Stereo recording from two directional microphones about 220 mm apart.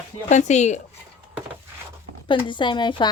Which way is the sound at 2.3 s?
20° left (ahead or behind).